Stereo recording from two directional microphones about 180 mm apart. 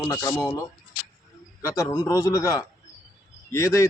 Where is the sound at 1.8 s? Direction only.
15° left (ahead or behind).